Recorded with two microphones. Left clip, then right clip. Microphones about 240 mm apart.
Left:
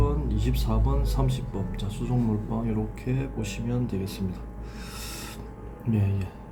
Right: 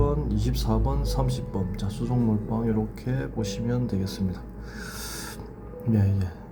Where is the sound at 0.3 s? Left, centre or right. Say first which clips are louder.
Right 2 dB; centre.